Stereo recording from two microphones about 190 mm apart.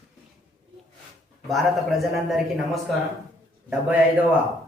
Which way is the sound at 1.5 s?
Centre (ahead or behind).